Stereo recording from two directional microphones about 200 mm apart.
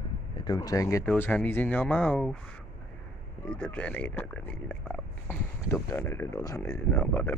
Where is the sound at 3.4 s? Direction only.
5° left (ahead or behind).